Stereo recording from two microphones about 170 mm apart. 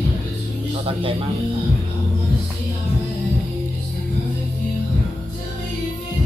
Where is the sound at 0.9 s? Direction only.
30° right (ahead or behind).